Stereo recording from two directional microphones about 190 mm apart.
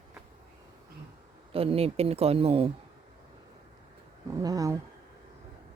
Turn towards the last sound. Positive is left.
turn(degrees=-20)  # may be behind; listen again after turning